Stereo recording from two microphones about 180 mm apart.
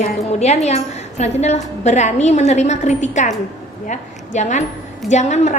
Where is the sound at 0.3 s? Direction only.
35° left (ahead or behind).